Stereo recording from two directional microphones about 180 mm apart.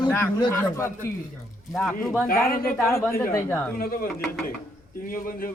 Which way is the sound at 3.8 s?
55° left (ahead or behind).